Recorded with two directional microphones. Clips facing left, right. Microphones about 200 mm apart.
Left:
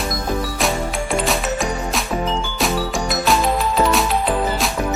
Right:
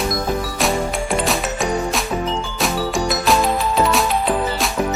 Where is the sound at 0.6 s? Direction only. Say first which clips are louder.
Right 1 dB; centre (ahead or behind).